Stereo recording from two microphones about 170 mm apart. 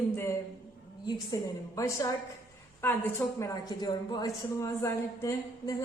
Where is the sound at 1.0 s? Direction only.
20° left (ahead or behind).